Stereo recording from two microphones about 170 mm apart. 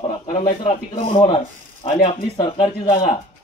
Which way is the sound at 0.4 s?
30° left (ahead or behind).